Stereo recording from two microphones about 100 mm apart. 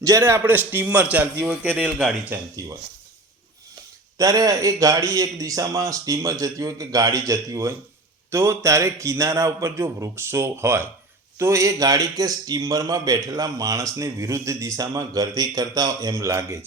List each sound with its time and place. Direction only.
0.0 s a man's voice: 30° right (ahead or behind); by 2.3 s 10° right (ahead or behind)
4.2 s a man's voice: 35° right (ahead or behind)